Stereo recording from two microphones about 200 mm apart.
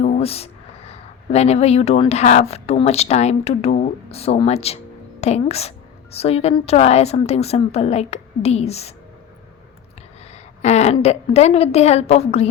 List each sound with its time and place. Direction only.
0.0 s a woman's voice: 30° left (ahead or behind)
10.3 s a woman's voice: 35° left (ahead or behind)